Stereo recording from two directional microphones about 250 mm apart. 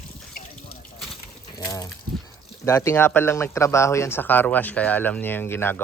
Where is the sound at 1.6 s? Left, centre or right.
Centre.